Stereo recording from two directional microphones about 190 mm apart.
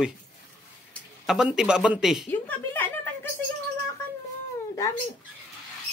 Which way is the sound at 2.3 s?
10° left (ahead or behind).